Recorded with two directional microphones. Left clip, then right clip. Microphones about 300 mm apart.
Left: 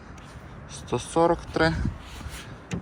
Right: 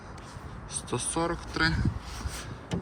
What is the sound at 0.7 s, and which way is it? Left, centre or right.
Speech, centre.